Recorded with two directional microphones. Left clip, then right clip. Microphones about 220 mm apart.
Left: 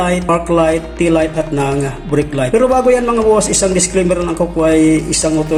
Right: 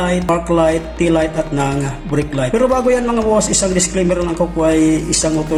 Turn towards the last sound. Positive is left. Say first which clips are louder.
# left 2 dB
turn(degrees=5)  # may be behind; listen again after turning